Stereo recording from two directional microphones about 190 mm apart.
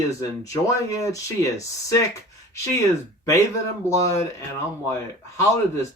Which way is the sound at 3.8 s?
15° left (ahead or behind).